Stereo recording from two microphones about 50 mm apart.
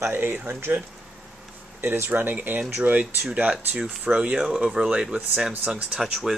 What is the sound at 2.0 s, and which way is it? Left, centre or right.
Speech, right.